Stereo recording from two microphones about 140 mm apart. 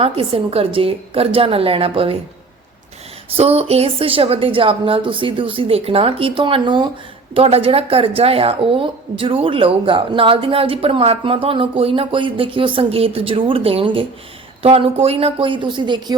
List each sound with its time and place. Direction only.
0.0 s a woman's voice: 40° right (ahead or behind)
3.2 s a woman's voice: 45° right (ahead or behind)